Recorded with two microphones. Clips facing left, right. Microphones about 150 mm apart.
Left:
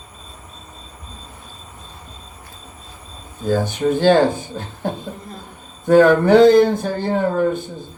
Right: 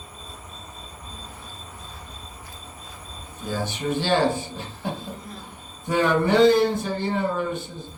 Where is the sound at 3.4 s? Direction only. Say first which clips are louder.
Left 9 dB; 50° left (ahead or behind).